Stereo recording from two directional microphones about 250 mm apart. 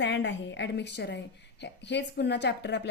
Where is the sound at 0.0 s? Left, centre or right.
Left.